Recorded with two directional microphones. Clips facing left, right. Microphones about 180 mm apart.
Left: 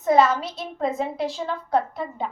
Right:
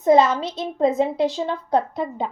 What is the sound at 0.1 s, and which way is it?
A woman's voice, 20° right (ahead or behind).